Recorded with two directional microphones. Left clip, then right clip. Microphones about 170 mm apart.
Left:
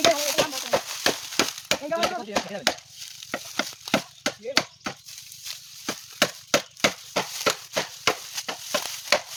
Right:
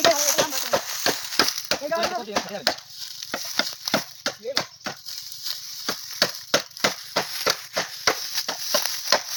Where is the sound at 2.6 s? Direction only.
Centre (ahead or behind).